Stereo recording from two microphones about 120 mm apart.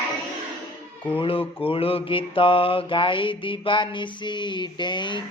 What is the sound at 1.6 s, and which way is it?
Mantra, 50° left (ahead or behind).